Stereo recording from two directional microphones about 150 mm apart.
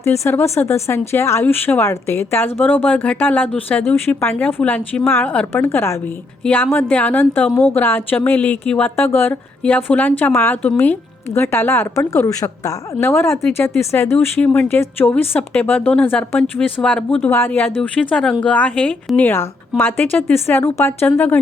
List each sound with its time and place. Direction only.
0.0 s speech: 15° left (ahead or behind)